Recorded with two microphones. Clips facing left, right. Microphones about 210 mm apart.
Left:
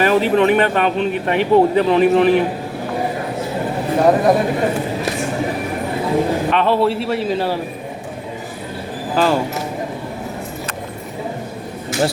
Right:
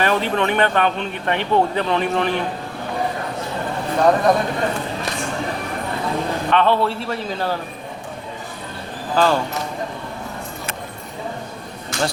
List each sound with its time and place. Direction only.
0.0 s a man's voice: 5° left (ahead or behind)
3.6 s speech: 5° left (ahead or behind)
6.0 s a man's voice: 5° left (ahead or behind)
9.1 s a man's voice: 5° left (ahead or behind)